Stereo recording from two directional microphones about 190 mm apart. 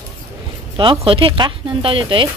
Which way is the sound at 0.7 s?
25° right (ahead or behind).